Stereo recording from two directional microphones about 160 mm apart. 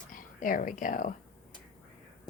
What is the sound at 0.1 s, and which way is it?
Speech, 60° left (ahead or behind).